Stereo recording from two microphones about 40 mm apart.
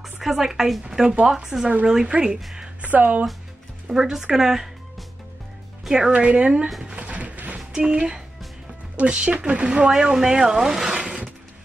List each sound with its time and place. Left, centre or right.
0.0 s speech: centre
2.8 s speech: right
3.9 s speech: centre
6.1 s speech: right
7.0 s music: right
7.5 s speech: right
9.8 s speech: centre
11.0 s a sound: right